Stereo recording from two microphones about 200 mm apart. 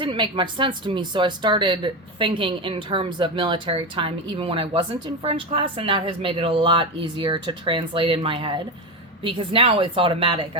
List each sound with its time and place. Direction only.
0.0 s speech: 25° right (ahead or behind)